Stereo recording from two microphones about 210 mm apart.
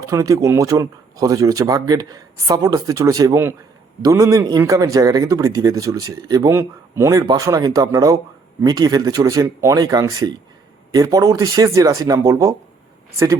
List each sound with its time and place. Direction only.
0.0 s speech: 15° right (ahead or behind)